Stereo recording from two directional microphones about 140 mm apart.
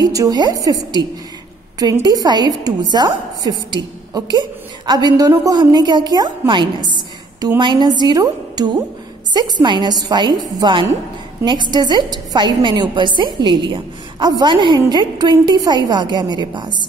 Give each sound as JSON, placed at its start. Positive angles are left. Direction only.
{"t": 0.1, "sound": "a woman's voice", "side_deg": -25}